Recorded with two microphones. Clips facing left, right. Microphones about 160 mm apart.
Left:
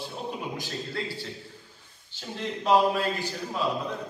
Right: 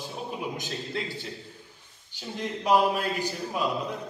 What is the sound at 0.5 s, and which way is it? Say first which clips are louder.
Speech: even; 20° right (ahead or behind).